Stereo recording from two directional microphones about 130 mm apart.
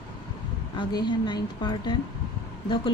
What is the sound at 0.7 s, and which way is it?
Speech, 35° left (ahead or behind).